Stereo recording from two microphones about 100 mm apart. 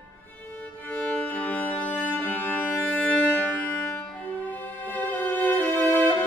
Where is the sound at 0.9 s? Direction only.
10° left (ahead or behind).